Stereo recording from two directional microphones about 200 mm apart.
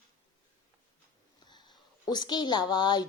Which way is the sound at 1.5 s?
20° left (ahead or behind).